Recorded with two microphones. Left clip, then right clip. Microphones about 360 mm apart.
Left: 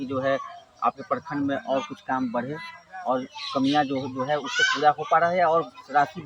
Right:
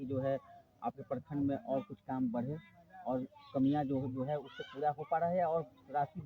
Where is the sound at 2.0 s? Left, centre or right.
Right.